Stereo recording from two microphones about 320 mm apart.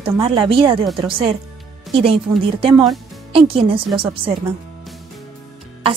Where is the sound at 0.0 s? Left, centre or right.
Centre.